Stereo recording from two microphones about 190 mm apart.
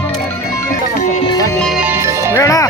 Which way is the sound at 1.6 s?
5° right (ahead or behind).